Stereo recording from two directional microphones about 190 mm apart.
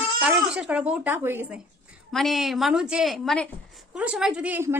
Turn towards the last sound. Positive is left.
turn(degrees=-10)  # may be behind; listen again after turning